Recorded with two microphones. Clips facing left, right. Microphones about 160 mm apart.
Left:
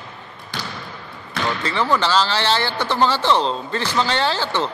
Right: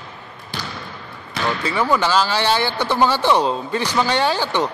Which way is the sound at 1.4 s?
10° right (ahead or behind).